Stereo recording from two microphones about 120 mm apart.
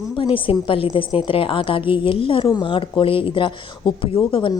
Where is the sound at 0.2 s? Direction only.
45° left (ahead or behind).